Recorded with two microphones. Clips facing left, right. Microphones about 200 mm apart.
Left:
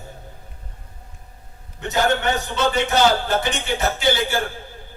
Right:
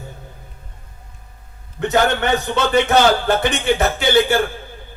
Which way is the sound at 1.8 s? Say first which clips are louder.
Right 3 dB; 60° right (ahead or behind).